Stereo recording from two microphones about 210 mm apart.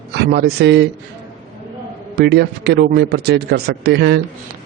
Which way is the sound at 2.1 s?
50° right (ahead or behind).